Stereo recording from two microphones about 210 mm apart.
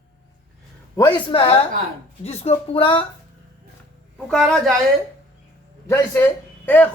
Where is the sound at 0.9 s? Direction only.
20° left (ahead or behind).